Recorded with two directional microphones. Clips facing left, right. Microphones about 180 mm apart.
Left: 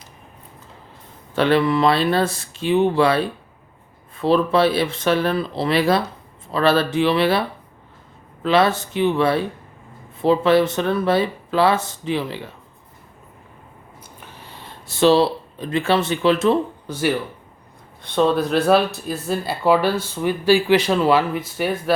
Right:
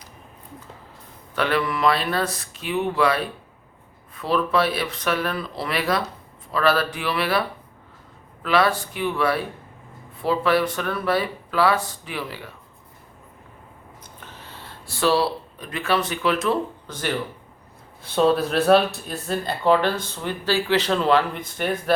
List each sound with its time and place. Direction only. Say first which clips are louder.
1.4 s speech: left 6 dB; 25° left (ahead or behind)
14.2 s a sound: left 1 dB; 10° left (ahead or behind)
16.8 s speech: left 6 dB; 10° left (ahead or behind)
18.0 s speech: left 1 dB; 5° right (ahead or behind)